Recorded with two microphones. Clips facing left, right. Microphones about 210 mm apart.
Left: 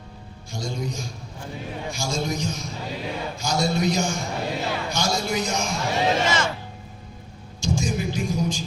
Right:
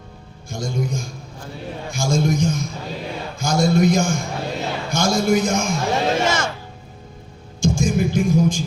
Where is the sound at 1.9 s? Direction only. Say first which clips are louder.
Right 8 dB; 50° right (ahead or behind).